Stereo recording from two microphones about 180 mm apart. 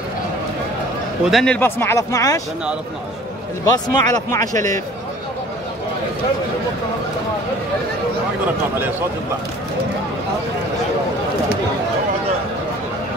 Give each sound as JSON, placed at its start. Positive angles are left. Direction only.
{"t": 1.2, "sound": "speech", "side_deg": 0}
{"t": 3.6, "sound": "speech", "side_deg": 20}